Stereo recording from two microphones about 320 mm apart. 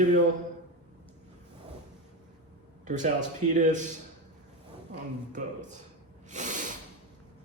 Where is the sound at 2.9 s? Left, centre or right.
Right.